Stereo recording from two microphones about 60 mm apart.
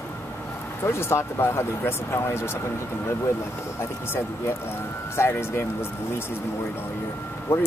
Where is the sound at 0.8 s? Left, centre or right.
Left.